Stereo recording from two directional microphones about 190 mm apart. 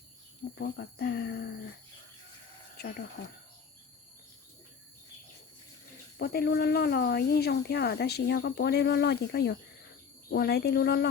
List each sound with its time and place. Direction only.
0.6 s speech: 55° left (ahead or behind)
2.7 s speech: 55° left (ahead or behind)
6.1 s speech: 55° left (ahead or behind)